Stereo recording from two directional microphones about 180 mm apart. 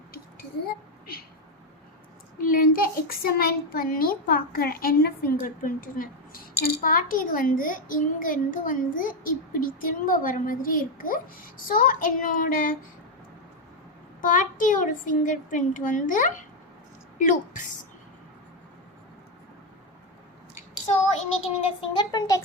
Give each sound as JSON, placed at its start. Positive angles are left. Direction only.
{"t": 2.4, "sound": "a child's voice", "side_deg": 50}
{"t": 14.2, "sound": "a child's voice", "side_deg": 45}
{"t": 21.8, "sound": "a child's voice", "side_deg": 25}